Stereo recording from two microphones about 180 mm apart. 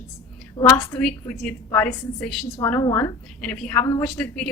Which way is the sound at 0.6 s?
15° left (ahead or behind).